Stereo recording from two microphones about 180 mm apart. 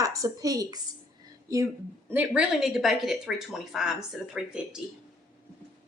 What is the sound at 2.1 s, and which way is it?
Speech, 5° right (ahead or behind).